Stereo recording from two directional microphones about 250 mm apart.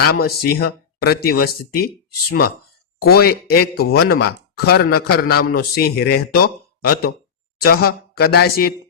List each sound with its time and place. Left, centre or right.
0.1 s speech: left